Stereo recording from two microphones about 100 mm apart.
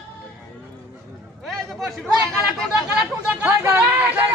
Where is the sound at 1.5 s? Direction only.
Centre (ahead or behind).